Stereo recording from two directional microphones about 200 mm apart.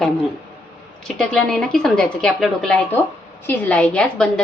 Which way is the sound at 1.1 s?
5° left (ahead or behind).